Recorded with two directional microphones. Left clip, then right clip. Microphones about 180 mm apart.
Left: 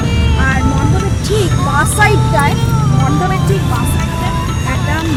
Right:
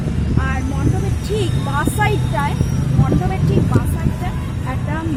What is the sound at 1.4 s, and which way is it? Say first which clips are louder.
Music: left 8 dB; 5° left (ahead or behind).